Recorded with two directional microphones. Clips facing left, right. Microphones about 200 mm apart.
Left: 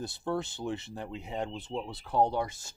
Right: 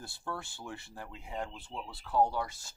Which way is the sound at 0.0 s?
20° left (ahead or behind).